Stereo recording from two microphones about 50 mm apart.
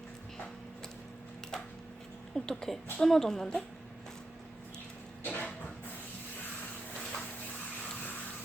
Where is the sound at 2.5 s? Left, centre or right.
Centre.